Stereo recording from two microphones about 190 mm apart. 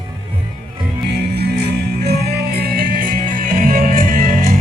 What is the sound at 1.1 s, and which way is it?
Music, 60° right (ahead or behind).